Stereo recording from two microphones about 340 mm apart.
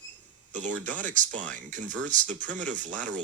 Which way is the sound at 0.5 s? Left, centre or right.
Right.